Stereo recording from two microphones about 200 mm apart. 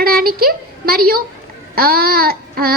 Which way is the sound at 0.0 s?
50° right (ahead or behind).